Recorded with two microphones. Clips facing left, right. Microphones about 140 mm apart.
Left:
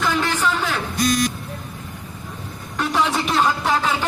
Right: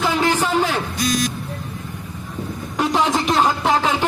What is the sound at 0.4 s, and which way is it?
Music, 35° right (ahead or behind).